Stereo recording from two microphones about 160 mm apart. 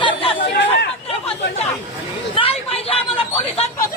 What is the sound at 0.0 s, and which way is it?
Chatter, 35° left (ahead or behind).